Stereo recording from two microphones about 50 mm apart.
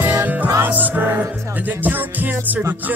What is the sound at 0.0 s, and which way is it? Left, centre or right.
Music, right.